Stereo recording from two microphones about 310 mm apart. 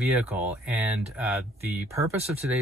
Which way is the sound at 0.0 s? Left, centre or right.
Centre.